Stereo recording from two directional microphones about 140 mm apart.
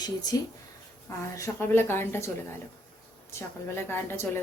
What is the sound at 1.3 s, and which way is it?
Speech, 20° left (ahead or behind).